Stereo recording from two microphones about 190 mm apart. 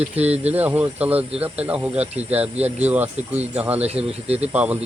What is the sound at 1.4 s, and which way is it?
Speech, 5° right (ahead or behind).